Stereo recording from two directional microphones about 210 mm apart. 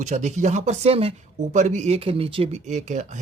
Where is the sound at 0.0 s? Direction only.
35° right (ahead or behind).